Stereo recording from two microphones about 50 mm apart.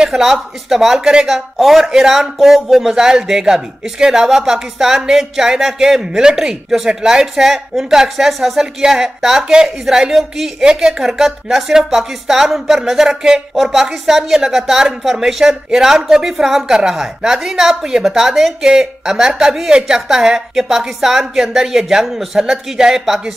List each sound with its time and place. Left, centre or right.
0.0 s speech: centre